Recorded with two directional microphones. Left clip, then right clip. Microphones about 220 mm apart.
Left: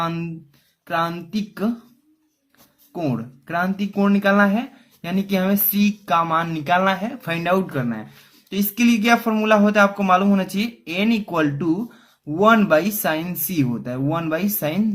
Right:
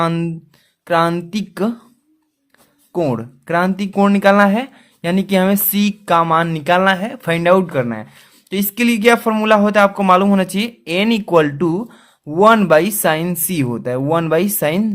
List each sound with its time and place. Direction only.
0.0 s speech: 50° right (ahead or behind)
2.9 s speech: 50° right (ahead or behind)